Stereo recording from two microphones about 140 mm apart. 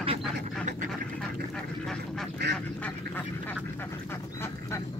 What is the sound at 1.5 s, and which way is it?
Duck, 5° left (ahead or behind).